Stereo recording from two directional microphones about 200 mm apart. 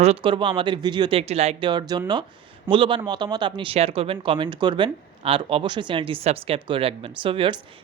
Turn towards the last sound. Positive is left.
turn(degrees=-25)  # may be behind; listen again after turning